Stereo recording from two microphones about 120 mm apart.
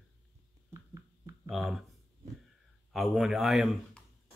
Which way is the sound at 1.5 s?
Centre (ahead or behind).